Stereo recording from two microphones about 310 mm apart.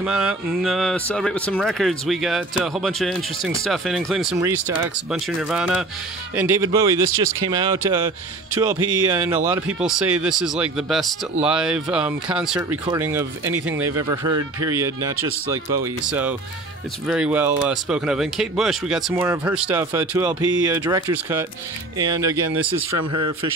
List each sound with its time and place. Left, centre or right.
0.0 s speech: centre
9.7 s speech: centre
22.8 s speech: right